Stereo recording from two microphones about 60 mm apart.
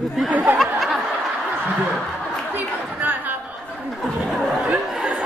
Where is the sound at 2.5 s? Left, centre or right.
Right.